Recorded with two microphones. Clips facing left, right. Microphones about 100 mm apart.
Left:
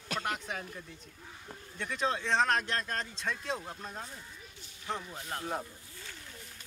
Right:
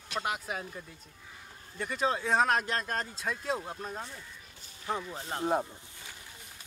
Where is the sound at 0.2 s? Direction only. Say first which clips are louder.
Right 4 dB; 5° right (ahead or behind).